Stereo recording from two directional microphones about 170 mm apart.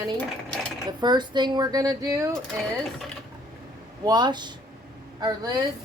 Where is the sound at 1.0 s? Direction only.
25° right (ahead or behind).